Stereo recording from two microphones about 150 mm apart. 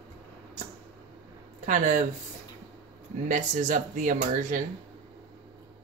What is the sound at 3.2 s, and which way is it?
Speech, 55° right (ahead or behind).